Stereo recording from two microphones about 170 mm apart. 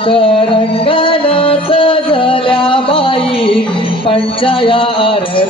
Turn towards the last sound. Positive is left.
turn(degrees=30)  # may be behind; listen again after turning